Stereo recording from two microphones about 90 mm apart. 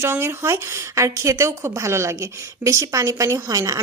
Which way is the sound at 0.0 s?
30° right (ahead or behind).